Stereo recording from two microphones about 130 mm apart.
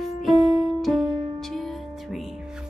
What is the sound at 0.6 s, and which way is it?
Music, centre (ahead or behind).